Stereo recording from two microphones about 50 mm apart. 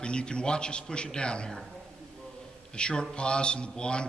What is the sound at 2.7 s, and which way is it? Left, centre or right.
A man's voice, centre.